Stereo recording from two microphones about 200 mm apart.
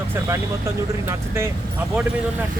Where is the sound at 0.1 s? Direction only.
15° right (ahead or behind).